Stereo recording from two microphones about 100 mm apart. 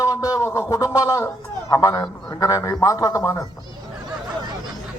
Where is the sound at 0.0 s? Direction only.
35° left (ahead or behind).